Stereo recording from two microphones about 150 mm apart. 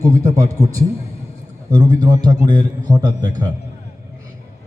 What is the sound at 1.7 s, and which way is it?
A man's voice, 30° right (ahead or behind).